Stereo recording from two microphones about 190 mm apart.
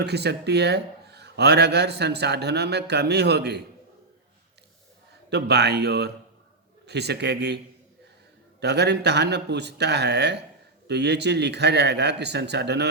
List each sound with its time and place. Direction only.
0.0 s speech: 60° right (ahead or behind)
5.3 s speech: 60° right (ahead or behind)
8.6 s speech: 60° right (ahead or behind)